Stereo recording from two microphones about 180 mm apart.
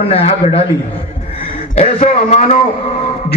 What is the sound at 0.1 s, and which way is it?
Speech, 35° left (ahead or behind).